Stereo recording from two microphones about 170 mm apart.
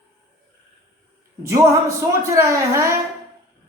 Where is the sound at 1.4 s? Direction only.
15° right (ahead or behind).